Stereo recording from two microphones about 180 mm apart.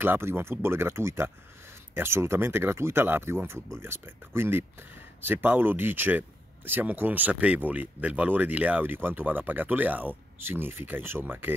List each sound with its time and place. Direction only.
0.0 s speech: 10° right (ahead or behind)